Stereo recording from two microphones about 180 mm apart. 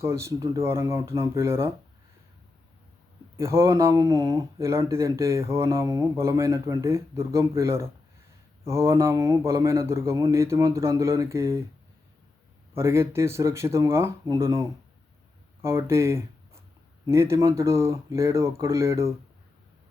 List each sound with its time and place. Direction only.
0.0 s speech: 15° right (ahead or behind)
3.3 s speech: 15° right (ahead or behind)
12.7 s speech: 15° right (ahead or behind)